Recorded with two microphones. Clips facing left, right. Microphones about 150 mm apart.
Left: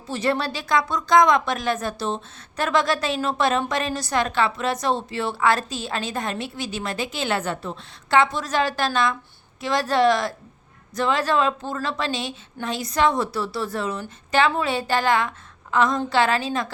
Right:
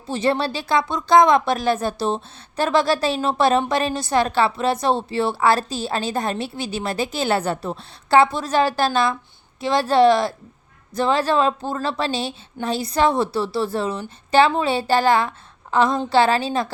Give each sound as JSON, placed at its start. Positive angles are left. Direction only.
{"t": 0.1, "sound": "a woman's voice", "side_deg": -25}